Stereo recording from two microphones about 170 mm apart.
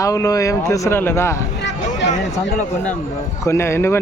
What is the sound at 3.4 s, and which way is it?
Speech, 15° left (ahead or behind).